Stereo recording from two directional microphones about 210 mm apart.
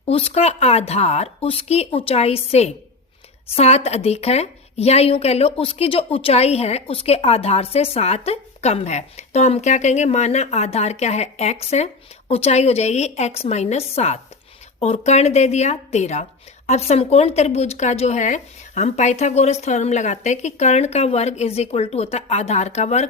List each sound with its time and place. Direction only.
0.1 s a woman's voice: 30° left (ahead or behind)